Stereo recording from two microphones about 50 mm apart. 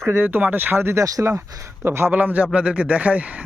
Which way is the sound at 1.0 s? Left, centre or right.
Right.